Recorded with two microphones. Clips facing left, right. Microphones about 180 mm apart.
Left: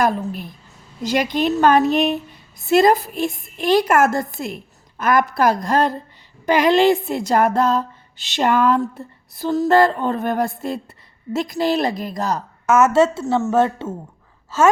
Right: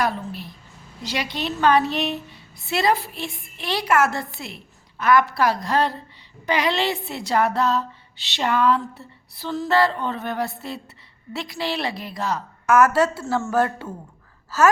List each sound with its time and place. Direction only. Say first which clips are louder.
0.0 s a woman's voice: left 5 dB; 50° left (ahead or behind)
12.6 s a woman's voice: left 3 dB; 25° left (ahead or behind)